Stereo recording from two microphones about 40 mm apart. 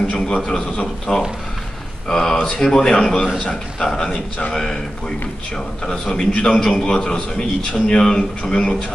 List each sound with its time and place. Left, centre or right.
0.0 s a man's voice: left
5.9 s a man's voice: centre
6.3 s a man's voice: left